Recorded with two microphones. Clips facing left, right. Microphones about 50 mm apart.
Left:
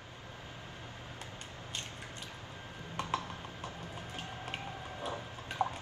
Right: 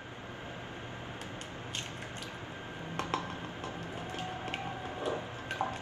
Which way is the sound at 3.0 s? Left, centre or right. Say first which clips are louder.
Even; right.